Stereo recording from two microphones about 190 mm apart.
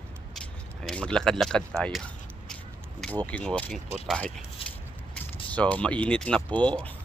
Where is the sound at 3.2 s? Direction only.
5° left (ahead or behind).